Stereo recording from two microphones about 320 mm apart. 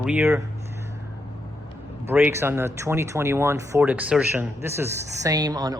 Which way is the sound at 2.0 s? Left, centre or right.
Centre.